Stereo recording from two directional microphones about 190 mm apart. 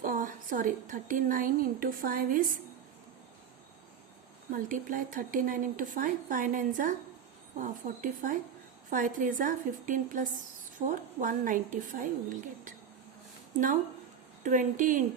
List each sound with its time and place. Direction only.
0.0 s a woman's voice: 45° right (ahead or behind)
4.5 s speech: 45° right (ahead or behind)
14.4 s speech: 45° right (ahead or behind)